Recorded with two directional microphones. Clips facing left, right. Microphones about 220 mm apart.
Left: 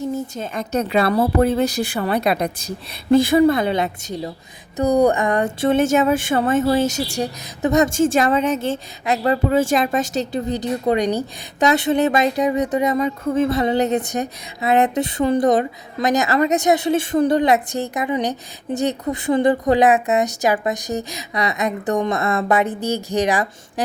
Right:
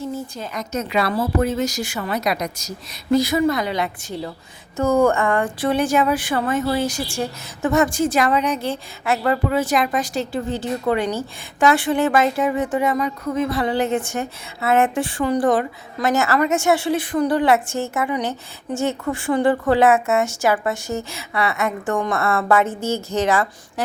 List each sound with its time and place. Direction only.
0.0 s a woman's voice: 25° left (ahead or behind)